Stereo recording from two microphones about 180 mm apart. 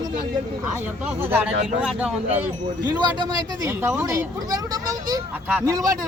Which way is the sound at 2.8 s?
25° right (ahead or behind).